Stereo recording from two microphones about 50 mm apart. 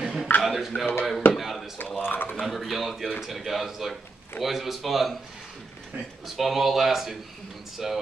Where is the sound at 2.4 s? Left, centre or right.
Centre.